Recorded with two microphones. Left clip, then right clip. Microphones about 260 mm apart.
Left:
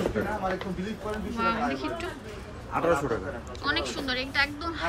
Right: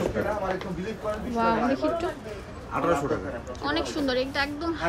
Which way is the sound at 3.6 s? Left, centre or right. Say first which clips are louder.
Right 1 dB; centre.